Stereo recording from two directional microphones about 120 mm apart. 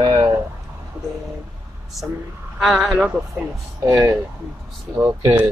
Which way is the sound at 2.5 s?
5° right (ahead or behind).